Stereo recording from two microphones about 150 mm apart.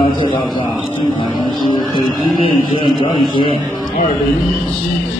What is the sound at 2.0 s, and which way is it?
A man's voice, 35° left (ahead or behind).